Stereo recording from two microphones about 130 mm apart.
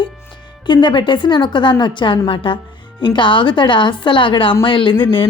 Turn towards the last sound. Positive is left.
turn(degrees=40)  # may be behind; listen again after turning